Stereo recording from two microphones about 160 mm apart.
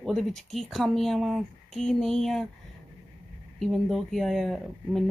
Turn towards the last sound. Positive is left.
turn(degrees=0)  # may be behind; listen again after turning